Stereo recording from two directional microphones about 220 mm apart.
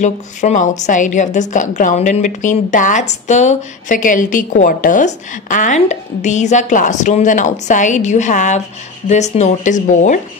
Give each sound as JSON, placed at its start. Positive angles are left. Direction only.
{"t": 0.0, "sound": "a woman's voice", "side_deg": 35}